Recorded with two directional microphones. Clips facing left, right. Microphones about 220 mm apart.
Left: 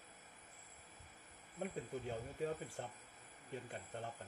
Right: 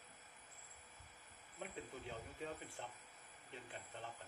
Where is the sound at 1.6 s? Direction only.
45° left (ahead or behind).